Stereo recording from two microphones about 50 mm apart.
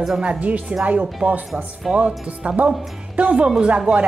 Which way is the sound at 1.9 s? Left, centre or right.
Right.